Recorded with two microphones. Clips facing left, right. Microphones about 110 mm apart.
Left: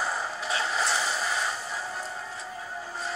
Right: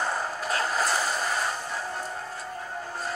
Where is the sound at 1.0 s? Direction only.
Centre (ahead or behind).